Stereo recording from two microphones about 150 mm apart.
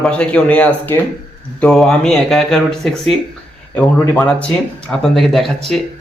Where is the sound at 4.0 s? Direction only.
15° left (ahead or behind).